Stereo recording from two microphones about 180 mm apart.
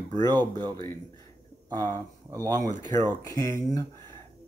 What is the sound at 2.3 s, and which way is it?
Speech, 20° right (ahead or behind).